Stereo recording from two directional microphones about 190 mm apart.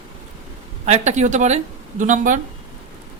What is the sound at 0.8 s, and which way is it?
Speech, 35° right (ahead or behind).